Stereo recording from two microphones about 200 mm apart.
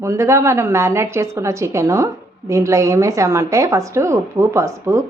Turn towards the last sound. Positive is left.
turn(degrees=-15)  # may be behind; listen again after turning